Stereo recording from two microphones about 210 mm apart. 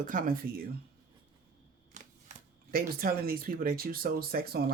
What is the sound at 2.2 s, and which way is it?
Speech, 45° right (ahead or behind).